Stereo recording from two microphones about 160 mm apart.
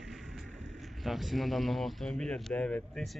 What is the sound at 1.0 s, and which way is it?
Speech, centre (ahead or behind).